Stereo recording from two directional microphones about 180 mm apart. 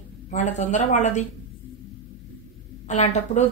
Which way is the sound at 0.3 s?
40° left (ahead or behind).